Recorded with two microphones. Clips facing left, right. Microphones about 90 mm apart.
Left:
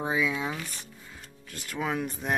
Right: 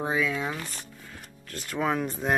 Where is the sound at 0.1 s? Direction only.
15° left (ahead or behind).